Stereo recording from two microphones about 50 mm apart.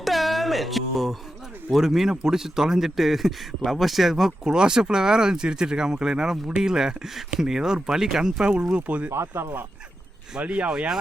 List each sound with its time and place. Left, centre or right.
0.0 s a sound: centre
1.7 s speech: centre; by 9.0 s right
9.0 s speech: right
10.4 s speech: right
10.7 s speech: centre